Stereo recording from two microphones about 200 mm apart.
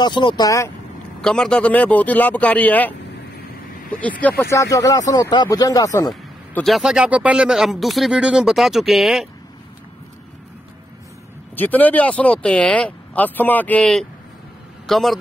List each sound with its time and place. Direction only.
0.0 s speech: 25° left (ahead or behind)
1.2 s speech: 5° left (ahead or behind)
4.2 s speech: 10° left (ahead or behind)
6.0 s speech: centre (ahead or behind)
11.5 s speech: 10° left (ahead or behind)